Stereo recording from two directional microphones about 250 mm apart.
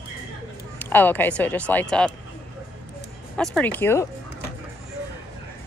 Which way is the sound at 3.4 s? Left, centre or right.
Centre.